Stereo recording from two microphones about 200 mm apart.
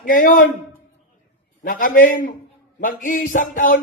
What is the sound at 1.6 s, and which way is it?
Music, 45° left (ahead or behind).